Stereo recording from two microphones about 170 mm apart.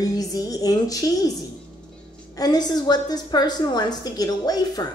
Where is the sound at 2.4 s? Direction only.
25° left (ahead or behind).